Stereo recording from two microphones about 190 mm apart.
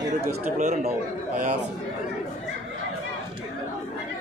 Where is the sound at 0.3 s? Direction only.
40° right (ahead or behind).